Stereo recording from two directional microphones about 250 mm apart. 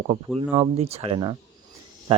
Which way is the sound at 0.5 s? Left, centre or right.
Right.